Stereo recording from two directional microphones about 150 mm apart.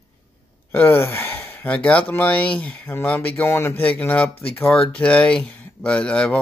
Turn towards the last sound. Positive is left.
turn(degrees=5)  # may be behind; listen again after turning